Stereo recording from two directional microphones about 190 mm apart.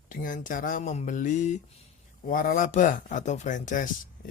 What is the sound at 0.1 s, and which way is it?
Speech, 45° left (ahead or behind).